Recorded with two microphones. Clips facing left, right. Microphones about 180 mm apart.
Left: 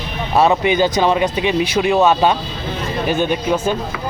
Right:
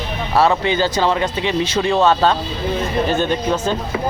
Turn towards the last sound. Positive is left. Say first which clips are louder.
# left 1 dB
turn(degrees=10)  # may be behind; listen again after turning